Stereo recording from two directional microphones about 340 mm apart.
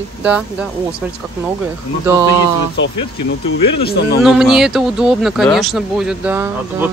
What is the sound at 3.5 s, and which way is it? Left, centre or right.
Speech, left.